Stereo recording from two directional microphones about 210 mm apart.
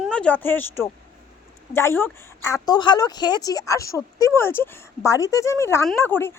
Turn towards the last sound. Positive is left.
turn(degrees=10)  # may be behind; listen again after turning